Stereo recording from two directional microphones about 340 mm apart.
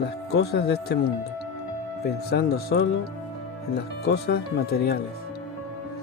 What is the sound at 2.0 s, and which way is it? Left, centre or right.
Speech, left.